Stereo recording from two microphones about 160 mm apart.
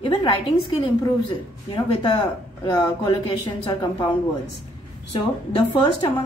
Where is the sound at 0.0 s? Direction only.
30° left (ahead or behind).